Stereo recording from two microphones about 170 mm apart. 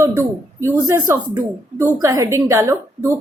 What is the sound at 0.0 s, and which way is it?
A woman's voice, 20° right (ahead or behind).